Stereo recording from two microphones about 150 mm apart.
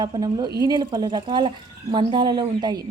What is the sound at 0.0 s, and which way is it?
Speech, 30° right (ahead or behind).